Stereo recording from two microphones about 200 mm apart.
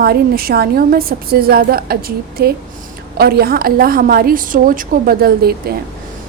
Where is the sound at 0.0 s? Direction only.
50° right (ahead or behind).